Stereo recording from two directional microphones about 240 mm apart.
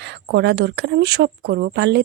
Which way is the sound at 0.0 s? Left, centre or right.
Right.